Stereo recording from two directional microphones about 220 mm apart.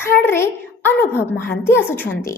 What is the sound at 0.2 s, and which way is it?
A woman's voice, 10° left (ahead or behind).